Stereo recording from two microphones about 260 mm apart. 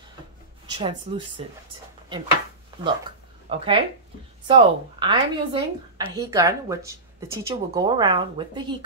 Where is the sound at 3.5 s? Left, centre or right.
Centre.